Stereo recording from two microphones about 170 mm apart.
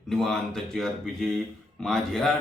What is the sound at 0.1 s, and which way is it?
A man's voice, 5° left (ahead or behind).